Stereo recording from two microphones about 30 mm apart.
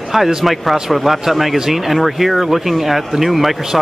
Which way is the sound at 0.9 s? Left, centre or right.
Centre.